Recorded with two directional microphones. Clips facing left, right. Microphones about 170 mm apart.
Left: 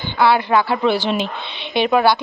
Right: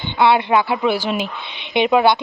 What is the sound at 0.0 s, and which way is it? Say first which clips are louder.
Speech: right 1 dB; 20° right (ahead or behind).